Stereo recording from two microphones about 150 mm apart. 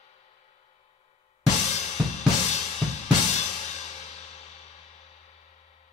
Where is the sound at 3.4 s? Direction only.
50° left (ahead or behind).